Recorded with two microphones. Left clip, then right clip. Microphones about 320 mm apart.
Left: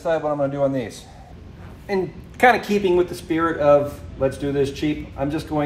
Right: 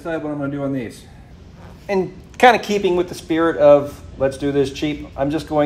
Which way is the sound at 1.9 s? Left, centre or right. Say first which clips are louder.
Right 3 dB; right.